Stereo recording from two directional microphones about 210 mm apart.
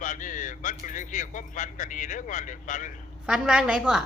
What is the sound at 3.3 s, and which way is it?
Speech, 5° right (ahead or behind).